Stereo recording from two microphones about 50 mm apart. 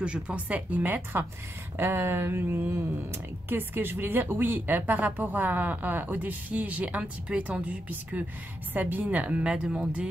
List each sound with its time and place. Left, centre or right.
0.0 s speech: right
0.5 s speech: right
1.8 s a sound: right
2.7 s speech: right
9.4 s speech: centre